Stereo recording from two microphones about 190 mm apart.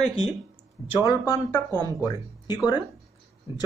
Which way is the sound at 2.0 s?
20° left (ahead or behind).